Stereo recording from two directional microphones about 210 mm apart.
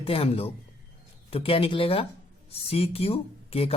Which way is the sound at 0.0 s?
25° left (ahead or behind).